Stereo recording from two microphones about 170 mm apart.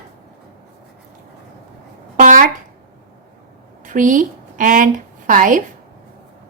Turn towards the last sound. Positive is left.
turn(degrees=-50)  # may be behind; listen again after turning